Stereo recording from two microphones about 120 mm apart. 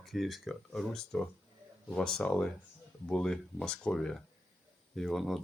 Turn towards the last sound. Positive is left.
turn(degrees=0)  # may be behind; listen again after turning